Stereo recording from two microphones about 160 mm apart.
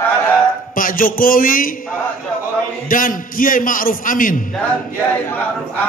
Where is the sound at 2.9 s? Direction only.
60° left (ahead or behind).